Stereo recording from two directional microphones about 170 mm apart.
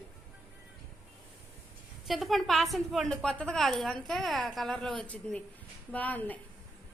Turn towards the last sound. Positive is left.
turn(degrees=10)  # may be behind; listen again after turning